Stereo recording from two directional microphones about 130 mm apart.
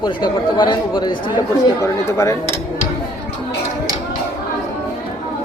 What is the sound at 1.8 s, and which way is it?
Speech, 25° left (ahead or behind).